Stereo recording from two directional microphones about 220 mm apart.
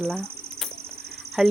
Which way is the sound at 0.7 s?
45° right (ahead or behind).